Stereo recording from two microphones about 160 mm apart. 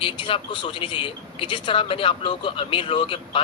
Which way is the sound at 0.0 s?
30° left (ahead or behind).